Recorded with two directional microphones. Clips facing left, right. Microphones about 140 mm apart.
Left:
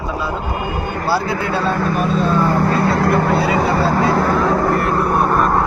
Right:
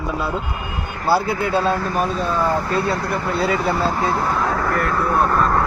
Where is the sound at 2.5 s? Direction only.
65° left (ahead or behind).